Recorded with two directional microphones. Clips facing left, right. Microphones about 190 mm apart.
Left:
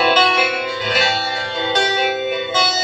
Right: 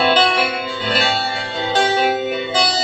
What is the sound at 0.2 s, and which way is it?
Music, 30° right (ahead or behind).